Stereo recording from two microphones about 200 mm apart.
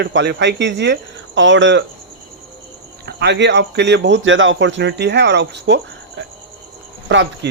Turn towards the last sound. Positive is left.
turn(degrees=-65)  # may be behind; listen again after turning